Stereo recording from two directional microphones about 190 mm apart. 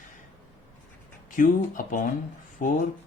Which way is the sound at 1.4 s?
45° left (ahead or behind).